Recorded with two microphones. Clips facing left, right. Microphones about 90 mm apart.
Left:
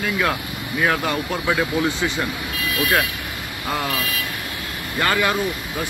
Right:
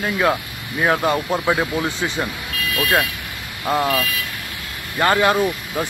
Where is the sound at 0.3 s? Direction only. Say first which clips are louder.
Right 3 dB; 20° right (ahead or behind).